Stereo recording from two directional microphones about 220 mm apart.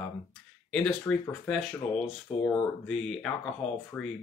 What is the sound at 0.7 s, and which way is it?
Speech, 5° left (ahead or behind).